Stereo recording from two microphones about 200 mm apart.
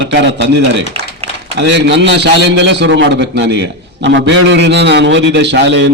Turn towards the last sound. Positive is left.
turn(degrees=-65)  # may be behind; listen again after turning